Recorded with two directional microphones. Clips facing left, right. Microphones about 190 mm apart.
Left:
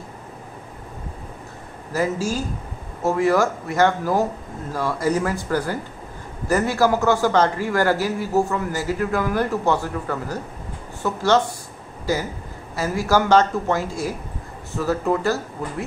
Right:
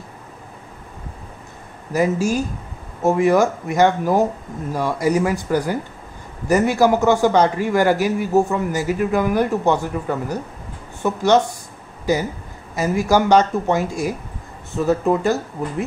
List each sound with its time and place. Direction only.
1.9 s a man's voice: 15° right (ahead or behind)